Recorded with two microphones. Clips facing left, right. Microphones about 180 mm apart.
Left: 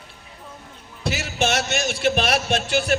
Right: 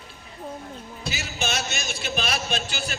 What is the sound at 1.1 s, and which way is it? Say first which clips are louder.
Music: left 7 dB; 75° left (ahead or behind).